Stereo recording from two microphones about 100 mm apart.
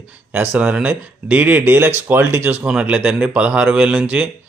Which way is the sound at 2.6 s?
10° right (ahead or behind).